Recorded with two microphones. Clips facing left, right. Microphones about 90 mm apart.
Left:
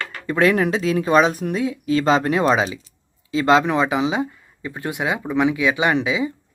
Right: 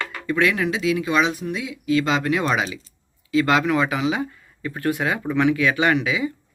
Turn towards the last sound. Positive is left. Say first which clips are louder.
# left 1 dB
turn(degrees=25)  # may be behind; listen again after turning